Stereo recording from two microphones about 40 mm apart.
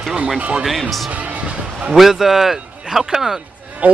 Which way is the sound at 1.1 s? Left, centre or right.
Right.